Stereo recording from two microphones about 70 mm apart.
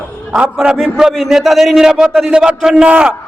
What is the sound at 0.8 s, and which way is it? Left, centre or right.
A man's voice, centre.